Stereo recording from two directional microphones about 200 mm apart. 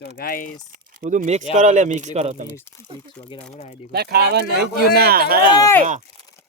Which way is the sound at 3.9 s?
55° right (ahead or behind).